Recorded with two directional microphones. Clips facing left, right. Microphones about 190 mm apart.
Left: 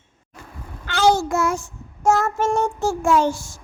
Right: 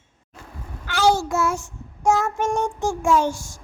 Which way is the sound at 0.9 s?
20° left (ahead or behind).